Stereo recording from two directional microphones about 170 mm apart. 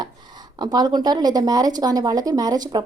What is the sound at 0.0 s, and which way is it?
A woman's voice, 25° right (ahead or behind).